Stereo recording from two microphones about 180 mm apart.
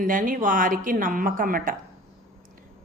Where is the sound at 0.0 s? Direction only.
50° right (ahead or behind).